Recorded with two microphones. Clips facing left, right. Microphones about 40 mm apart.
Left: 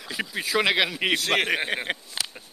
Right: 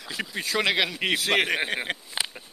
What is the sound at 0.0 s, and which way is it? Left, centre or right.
Speech, centre.